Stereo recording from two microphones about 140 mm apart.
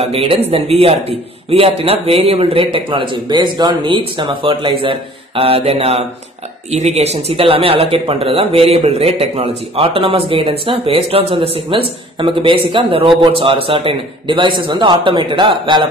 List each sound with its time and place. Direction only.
0.0 s a man's voice: 45° right (ahead or behind)